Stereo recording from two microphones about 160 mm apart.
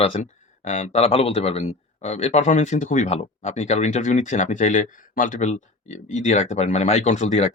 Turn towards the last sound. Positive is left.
turn(degrees=45)  # may be behind; listen again after turning